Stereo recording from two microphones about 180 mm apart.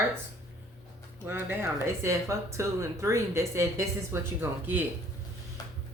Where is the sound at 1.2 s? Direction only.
10° right (ahead or behind).